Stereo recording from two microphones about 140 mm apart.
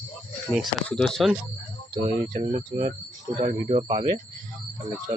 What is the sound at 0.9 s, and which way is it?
Speech, 5° left (ahead or behind).